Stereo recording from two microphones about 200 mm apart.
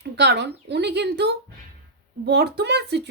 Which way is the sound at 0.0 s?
55° right (ahead or behind).